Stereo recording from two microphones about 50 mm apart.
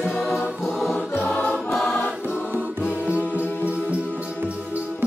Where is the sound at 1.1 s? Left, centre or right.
Left.